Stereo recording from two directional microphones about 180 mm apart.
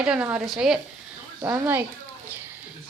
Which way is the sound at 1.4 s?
15° right (ahead or behind).